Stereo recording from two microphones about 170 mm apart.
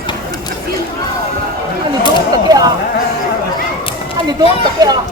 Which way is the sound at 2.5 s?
25° right (ahead or behind).